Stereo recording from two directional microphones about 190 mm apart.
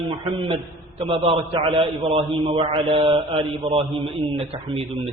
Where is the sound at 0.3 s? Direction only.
30° right (ahead or behind).